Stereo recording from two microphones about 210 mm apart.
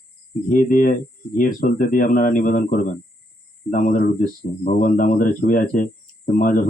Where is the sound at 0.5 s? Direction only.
40° left (ahead or behind).